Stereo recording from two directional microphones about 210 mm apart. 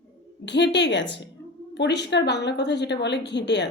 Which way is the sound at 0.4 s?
55° left (ahead or behind).